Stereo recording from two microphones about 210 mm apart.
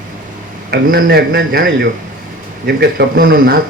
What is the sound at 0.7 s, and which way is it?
Speech, 50° right (ahead or behind).